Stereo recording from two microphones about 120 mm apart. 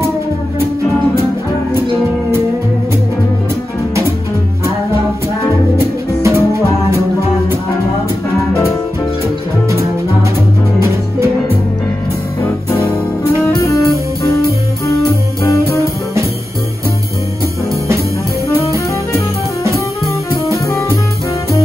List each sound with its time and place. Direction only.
6.2 s music: 25° right (ahead or behind)
13.6 s music: 25° left (ahead or behind)